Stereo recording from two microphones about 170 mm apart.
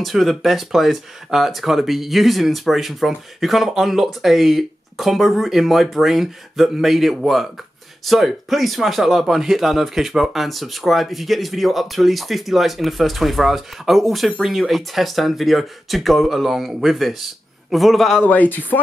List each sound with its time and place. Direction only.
0.0 s speech: centre (ahead or behind)
18.2 s speech: 10° left (ahead or behind)